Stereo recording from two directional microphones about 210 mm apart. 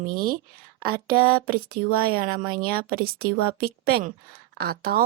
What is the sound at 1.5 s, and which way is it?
A woman's voice, 45° right (ahead or behind).